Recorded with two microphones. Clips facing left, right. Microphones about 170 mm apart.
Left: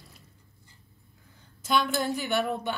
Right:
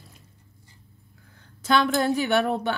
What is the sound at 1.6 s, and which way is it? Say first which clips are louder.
A woman's voice: right 5 dB; 85° right.